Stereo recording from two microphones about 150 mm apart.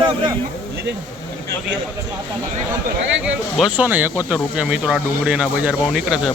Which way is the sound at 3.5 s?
5° right (ahead or behind).